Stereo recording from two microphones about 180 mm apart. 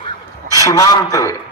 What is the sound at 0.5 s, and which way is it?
Speech, 20° left (ahead or behind).